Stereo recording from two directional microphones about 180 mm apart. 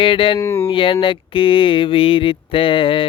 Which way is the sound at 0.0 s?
30° left (ahead or behind).